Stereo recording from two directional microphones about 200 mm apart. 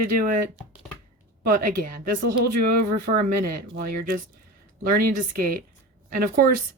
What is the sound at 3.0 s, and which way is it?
Speech, 50° right (ahead or behind).